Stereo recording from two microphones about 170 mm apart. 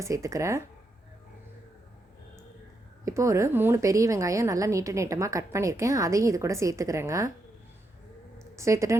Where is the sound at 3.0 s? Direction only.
20° right (ahead or behind).